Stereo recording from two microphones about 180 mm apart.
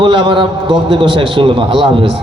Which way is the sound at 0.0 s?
25° right (ahead or behind).